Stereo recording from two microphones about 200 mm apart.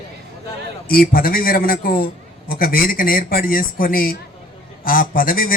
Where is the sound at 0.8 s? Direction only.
45° left (ahead or behind).